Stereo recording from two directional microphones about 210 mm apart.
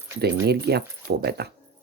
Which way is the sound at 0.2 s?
50° right (ahead or behind).